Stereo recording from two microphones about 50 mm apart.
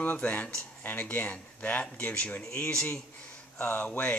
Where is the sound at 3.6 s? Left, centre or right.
Left.